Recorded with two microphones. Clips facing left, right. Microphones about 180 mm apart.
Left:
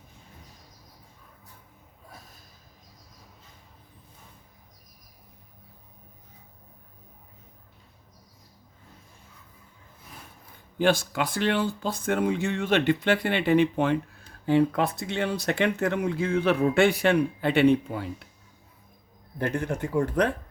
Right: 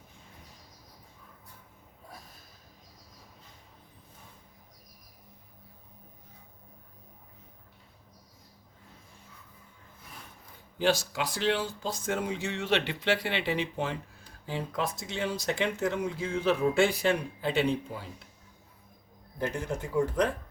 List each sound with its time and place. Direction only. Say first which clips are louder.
10.8 s speech: left 4 dB; 55° left (ahead or behind)
19.4 s speech: left 4 dB; 60° left (ahead or behind)